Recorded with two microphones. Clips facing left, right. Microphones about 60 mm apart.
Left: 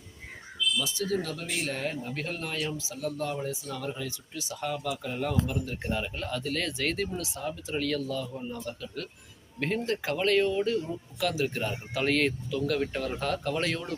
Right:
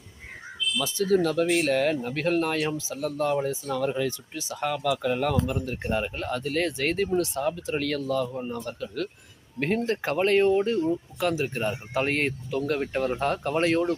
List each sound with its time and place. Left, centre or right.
1.0 s speech: right
3.7 s speech: right
4.5 s speech: right
5.5 s speech: right